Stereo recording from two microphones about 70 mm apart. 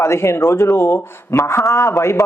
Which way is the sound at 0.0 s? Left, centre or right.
Left.